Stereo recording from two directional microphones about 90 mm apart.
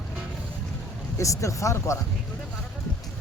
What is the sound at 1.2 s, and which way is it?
Speech, 35° left (ahead or behind).